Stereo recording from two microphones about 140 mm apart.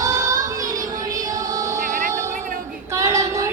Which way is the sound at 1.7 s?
65° right (ahead or behind).